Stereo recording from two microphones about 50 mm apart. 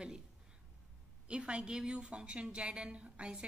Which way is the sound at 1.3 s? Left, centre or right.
Right.